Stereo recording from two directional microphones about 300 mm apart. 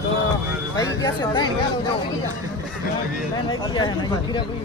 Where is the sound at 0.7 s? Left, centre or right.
Centre.